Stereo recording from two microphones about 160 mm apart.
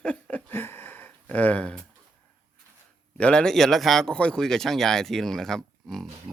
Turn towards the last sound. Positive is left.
turn(degrees=0)  # may be behind; listen again after turning